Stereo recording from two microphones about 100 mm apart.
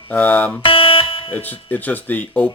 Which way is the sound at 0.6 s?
60° left (ahead or behind).